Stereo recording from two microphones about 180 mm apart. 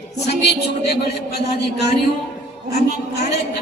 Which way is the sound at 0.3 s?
65° left (ahead or behind).